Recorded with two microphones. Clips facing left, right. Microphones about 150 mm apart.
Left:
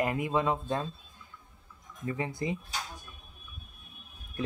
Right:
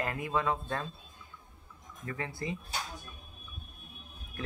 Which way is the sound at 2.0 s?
20° left (ahead or behind).